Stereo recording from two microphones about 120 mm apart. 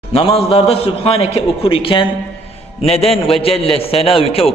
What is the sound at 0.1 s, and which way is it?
A man's voice, 50° left (ahead or behind).